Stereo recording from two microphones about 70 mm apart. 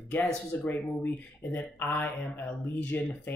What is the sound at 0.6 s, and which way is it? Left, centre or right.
Speech, left.